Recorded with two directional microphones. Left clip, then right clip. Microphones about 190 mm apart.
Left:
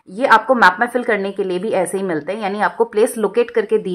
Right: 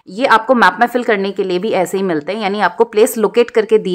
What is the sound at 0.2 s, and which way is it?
A woman's voice, 30° right (ahead or behind).